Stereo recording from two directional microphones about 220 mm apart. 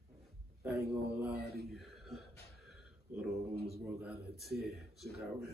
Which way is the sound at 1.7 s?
Centre (ahead or behind).